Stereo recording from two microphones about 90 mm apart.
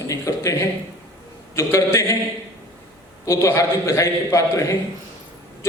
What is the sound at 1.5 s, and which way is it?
Speech, 30° left (ahead or behind).